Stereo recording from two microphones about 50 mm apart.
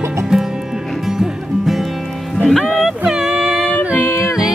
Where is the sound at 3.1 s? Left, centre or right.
Centre.